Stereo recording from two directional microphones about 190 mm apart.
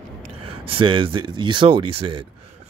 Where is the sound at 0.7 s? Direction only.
25° right (ahead or behind).